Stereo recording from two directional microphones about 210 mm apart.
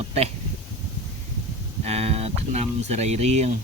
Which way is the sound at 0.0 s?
30° right (ahead or behind).